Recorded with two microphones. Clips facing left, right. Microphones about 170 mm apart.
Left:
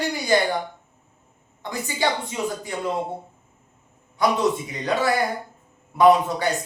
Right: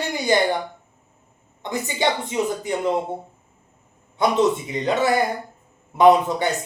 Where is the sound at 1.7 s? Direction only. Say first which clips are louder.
Right 2 dB; 20° right (ahead or behind).